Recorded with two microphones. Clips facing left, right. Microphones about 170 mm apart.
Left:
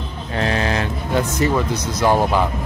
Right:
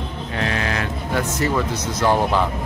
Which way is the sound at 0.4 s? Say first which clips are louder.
Left 4 dB; 30° left (ahead or behind).